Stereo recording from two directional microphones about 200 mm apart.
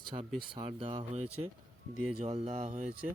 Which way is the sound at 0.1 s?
20° right (ahead or behind).